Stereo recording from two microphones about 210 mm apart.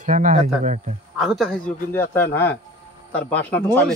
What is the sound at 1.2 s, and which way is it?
A man's voice, centre (ahead or behind).